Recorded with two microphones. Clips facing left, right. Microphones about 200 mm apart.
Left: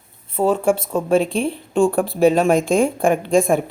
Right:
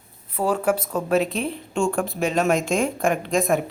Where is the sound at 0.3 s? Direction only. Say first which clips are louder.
Left 4 dB; 25° left (ahead or behind).